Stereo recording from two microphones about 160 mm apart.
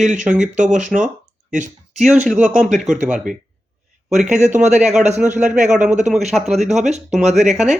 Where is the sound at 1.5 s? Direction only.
50° right (ahead or behind).